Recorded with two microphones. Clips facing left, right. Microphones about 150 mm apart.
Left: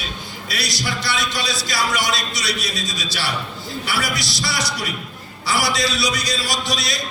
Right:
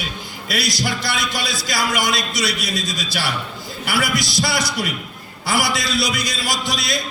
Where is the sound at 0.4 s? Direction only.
50° right (ahead or behind).